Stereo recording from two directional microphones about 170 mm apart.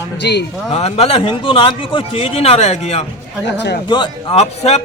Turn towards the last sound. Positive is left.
turn(degrees=40)  # may be behind; listen again after turning